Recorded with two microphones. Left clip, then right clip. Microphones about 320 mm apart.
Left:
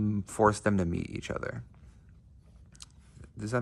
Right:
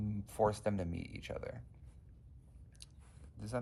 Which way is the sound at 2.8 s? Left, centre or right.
Left.